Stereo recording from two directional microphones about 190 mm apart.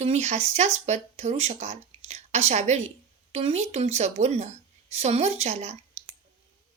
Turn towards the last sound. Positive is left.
turn(degrees=-35)  # may be behind; listen again after turning